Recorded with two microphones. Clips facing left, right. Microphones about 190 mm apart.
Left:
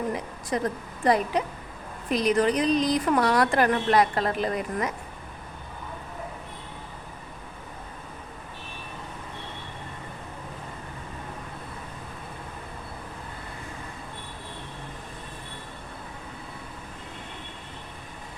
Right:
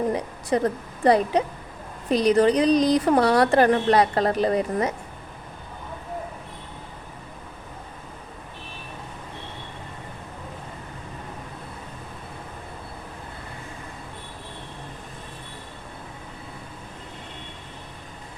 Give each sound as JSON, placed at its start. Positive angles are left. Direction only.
{"t": 0.1, "sound": "a woman's voice", "side_deg": -35}